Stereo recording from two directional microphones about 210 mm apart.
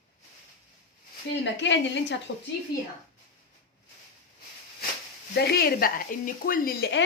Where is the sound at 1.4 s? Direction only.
60° left (ahead or behind).